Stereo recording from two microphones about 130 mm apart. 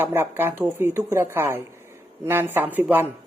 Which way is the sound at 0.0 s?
15° right (ahead or behind).